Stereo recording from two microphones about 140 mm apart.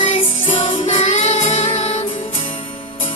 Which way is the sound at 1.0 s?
60° left (ahead or behind).